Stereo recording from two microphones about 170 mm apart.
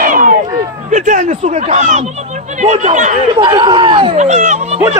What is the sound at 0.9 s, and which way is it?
Speech, 50° right (ahead or behind).